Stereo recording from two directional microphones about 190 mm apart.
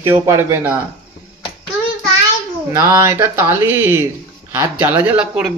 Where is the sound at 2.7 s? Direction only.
15° right (ahead or behind).